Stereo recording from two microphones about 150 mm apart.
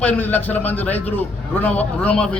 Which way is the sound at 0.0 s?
10° left (ahead or behind).